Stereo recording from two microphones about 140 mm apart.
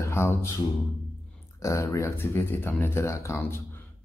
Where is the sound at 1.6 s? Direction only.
20° left (ahead or behind).